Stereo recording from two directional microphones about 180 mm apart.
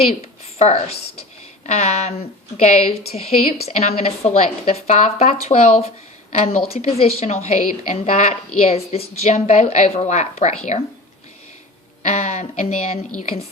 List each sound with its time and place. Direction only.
0.6 s a woman's voice: 35° left (ahead or behind)
12.0 s a woman's voice: 40° left (ahead or behind)